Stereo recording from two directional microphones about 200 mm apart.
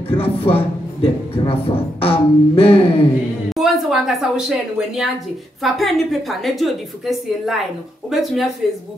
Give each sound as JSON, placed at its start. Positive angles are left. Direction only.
{"t": 0.1, "sound": "a sound", "side_deg": 30}
{"t": 3.4, "sound": "a woman's voice", "side_deg": 0}
{"t": 8.6, "sound": "a woman's voice", "side_deg": 0}